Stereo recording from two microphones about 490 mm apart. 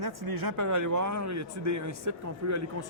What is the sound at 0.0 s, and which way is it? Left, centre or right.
Speech, right.